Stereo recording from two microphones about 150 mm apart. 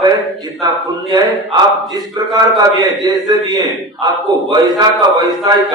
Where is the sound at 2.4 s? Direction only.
25° right (ahead or behind).